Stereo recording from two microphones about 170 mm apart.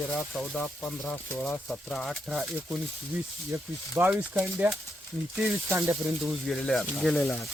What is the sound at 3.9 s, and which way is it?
Speech, 15° right (ahead or behind).